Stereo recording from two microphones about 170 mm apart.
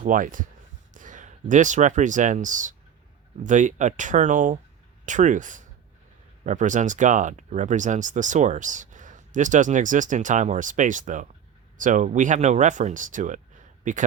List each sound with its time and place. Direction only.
0.0 s speech: 50° right (ahead or behind)